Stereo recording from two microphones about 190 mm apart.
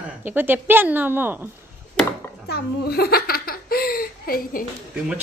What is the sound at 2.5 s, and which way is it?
Giggle, 55° left (ahead or behind).